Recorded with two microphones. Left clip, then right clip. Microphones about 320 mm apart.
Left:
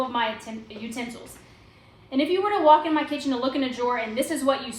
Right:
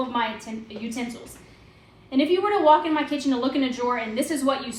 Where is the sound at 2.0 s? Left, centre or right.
Centre.